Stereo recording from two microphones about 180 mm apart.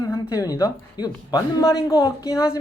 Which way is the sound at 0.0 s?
20° left (ahead or behind).